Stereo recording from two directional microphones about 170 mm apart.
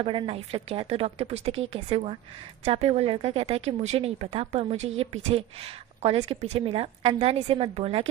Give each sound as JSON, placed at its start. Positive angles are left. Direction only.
{"t": 0.0, "sound": "a woman's voice", "side_deg": -30}